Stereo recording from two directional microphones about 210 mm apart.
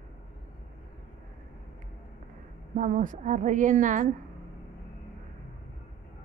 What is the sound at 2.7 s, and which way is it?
A woman's voice, 40° right (ahead or behind).